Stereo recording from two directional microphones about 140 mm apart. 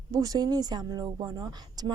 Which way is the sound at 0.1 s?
25° right (ahead or behind).